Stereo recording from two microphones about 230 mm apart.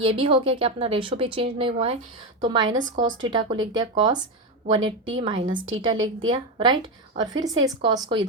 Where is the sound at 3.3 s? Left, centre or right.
Centre.